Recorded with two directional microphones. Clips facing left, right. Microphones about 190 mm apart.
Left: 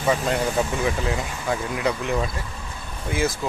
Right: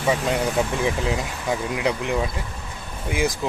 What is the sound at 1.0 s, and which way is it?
Speech, 15° right (ahead or behind).